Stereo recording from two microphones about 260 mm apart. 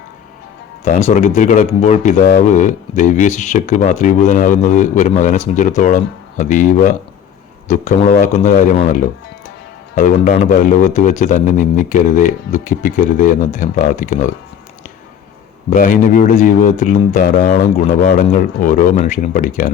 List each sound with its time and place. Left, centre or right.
0.9 s speech: left
15.7 s speech: left